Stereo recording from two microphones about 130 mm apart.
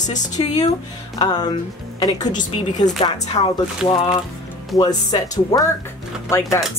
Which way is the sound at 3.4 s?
50° left (ahead or behind).